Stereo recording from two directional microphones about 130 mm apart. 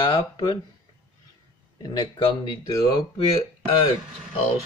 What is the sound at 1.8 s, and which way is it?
Speech, 30° left (ahead or behind).